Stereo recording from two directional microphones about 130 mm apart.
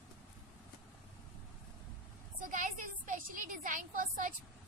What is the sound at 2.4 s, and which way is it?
A woman's voice, 85° right.